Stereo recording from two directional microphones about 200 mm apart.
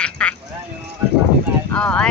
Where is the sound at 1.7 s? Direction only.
5° left (ahead or behind).